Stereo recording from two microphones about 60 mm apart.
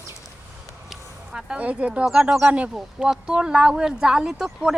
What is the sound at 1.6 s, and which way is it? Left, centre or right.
Speech, right.